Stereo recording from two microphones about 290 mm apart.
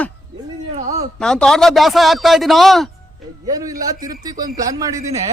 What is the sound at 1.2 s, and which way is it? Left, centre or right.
Speech, centre.